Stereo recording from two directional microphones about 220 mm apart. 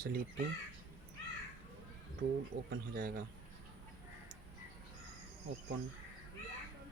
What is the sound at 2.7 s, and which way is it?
Speech, 45° right (ahead or behind).